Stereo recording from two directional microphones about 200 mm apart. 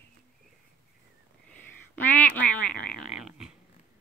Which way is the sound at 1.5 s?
10° left (ahead or behind).